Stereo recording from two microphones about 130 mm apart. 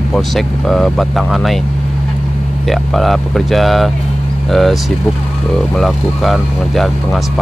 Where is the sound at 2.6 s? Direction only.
Centre (ahead or behind).